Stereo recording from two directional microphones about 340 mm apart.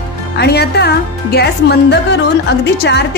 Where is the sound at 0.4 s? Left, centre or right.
Left.